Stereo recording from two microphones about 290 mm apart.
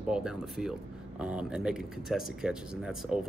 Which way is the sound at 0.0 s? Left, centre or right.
Centre.